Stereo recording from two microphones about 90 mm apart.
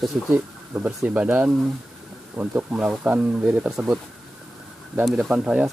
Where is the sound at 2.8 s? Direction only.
10° right (ahead or behind).